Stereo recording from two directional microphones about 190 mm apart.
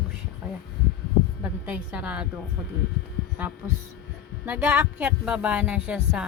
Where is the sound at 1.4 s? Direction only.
10° right (ahead or behind).